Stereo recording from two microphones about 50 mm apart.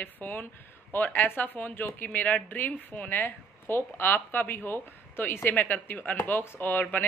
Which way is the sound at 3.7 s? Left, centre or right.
Left.